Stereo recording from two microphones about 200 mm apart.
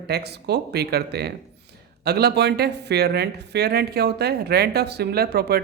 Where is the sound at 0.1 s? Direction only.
55° right (ahead or behind).